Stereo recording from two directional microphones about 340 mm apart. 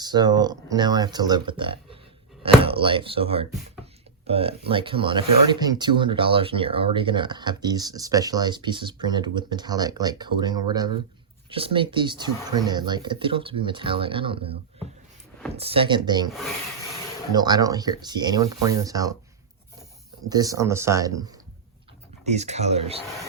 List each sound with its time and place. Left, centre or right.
0.0 s speech: centre
3.8 s a sound: centre
4.3 s speech: centre
16.3 s speech: centre
17.3 s speech: centre
20.3 s speech: centre